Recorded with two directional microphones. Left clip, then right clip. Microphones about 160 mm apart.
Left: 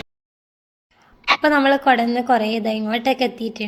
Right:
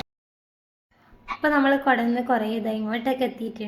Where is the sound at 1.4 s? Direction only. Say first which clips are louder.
Left 2 dB; 30° left (ahead or behind).